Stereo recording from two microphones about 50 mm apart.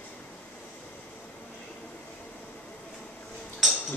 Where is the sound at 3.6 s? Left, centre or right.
Centre.